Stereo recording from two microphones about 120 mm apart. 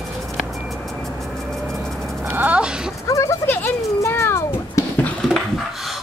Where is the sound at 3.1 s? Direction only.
25° left (ahead or behind).